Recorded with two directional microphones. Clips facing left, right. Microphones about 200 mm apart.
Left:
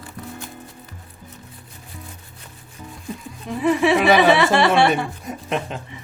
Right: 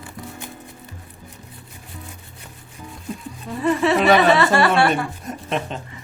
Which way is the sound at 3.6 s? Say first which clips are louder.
Left 1 dB; 10° left (ahead or behind).